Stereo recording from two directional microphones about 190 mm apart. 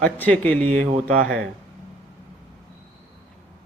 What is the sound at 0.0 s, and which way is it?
A man's voice, 5° left (ahead or behind).